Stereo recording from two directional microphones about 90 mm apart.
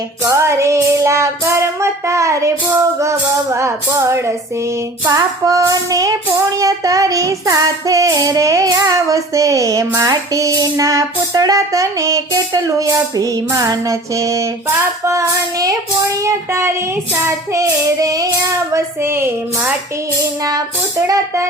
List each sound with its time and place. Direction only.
0.2 s child singing: 30° right (ahead or behind)
19.0 s a woman's voice: 25° right (ahead or behind)